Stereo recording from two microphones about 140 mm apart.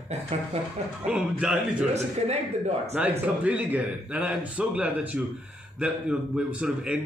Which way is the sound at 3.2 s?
10° right (ahead or behind).